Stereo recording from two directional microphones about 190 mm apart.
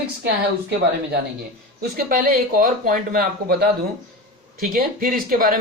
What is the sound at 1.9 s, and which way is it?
Speech, 45° right (ahead or behind).